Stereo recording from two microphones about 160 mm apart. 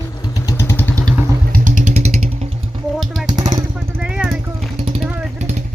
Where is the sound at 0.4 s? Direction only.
15° left (ahead or behind).